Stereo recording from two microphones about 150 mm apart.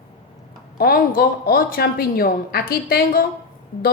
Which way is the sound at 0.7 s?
80° left.